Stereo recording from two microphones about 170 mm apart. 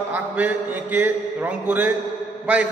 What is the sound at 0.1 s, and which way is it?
A man's voice, 10° right (ahead or behind).